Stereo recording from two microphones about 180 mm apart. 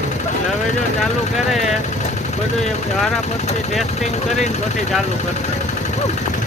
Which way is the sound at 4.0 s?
40° left (ahead or behind).